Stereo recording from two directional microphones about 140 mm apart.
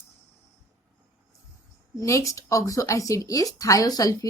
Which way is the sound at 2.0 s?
20° left (ahead or behind).